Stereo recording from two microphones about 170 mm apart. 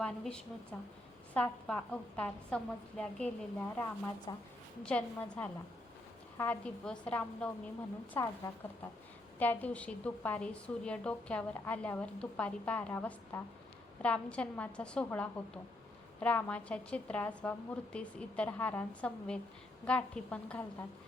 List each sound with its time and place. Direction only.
0.0 s a woman's voice: 5° left (ahead or behind)